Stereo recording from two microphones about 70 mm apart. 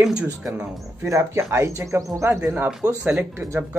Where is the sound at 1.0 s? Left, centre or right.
Right.